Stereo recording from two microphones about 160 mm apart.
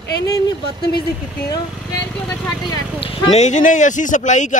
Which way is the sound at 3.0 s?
40° left (ahead or behind).